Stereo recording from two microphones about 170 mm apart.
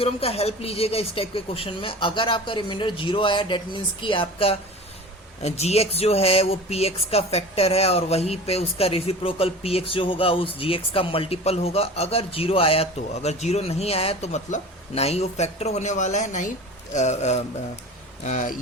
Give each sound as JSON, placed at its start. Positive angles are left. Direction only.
{"t": 0.0, "sound": "speech", "side_deg": 35}